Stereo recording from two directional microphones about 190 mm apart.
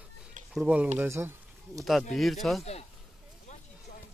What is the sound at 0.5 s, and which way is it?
Speech, 5° right (ahead or behind).